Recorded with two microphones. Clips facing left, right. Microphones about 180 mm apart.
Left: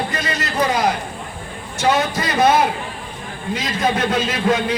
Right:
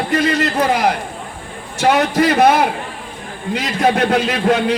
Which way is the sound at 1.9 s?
65° right (ahead or behind).